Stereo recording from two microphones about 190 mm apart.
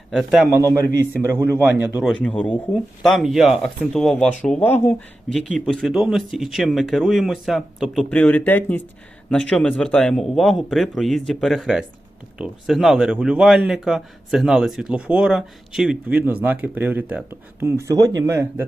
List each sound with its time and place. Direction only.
0.1 s a man's voice: centre (ahead or behind)
0.4 s a man's voice: 15° right (ahead or behind)
2.1 s a man's voice: 5° left (ahead or behind); by 18.6 s 15° right (ahead or behind)